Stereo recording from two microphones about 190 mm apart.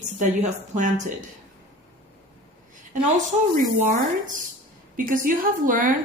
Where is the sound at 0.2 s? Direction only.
40° right (ahead or behind).